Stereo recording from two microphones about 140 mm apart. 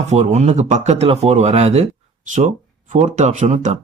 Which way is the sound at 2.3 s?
60° right (ahead or behind).